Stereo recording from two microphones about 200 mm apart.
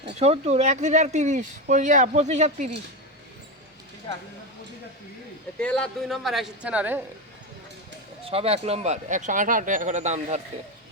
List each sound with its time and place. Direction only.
0.2 s speech: 30° right (ahead or behind)
5.5 s speech: 5° left (ahead or behind)
8.2 s speech: 30° right (ahead or behind)